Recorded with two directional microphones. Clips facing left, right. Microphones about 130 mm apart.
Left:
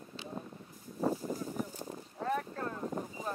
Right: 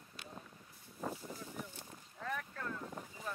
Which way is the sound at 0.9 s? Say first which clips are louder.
Left 10 dB; 40° left (ahead or behind).